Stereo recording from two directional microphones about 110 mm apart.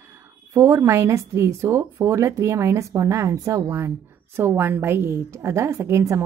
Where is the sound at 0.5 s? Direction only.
25° right (ahead or behind).